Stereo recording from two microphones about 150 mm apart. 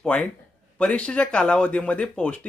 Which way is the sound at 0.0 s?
5° left (ahead or behind).